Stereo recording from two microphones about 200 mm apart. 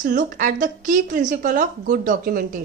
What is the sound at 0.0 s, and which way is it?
A woman's voice, 40° right (ahead or behind).